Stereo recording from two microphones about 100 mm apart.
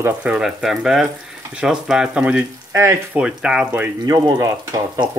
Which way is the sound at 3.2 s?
10° right (ahead or behind).